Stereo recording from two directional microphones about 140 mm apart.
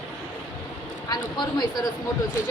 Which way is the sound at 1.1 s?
30° left (ahead or behind).